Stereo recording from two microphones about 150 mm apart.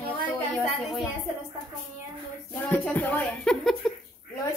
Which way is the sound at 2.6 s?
15° left (ahead or behind).